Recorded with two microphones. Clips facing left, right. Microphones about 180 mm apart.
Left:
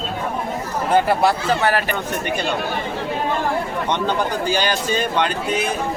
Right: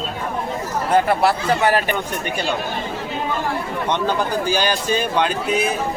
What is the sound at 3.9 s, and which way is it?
Speech, 10° right (ahead or behind).